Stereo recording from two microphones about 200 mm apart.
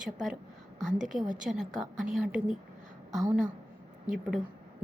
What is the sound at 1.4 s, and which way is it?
A woman's voice, 5° right (ahead or behind).